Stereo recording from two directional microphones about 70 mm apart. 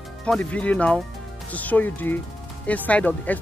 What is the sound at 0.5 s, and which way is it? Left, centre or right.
Speech, centre.